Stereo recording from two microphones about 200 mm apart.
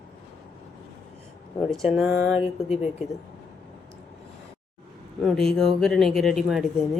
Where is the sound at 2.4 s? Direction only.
30° left (ahead or behind).